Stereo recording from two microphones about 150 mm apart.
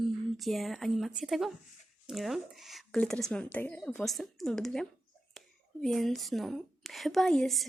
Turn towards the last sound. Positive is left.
turn(degrees=0)  # may be behind; listen again after turning